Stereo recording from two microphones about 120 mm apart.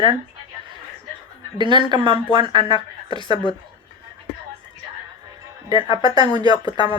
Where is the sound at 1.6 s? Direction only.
40° right (ahead or behind).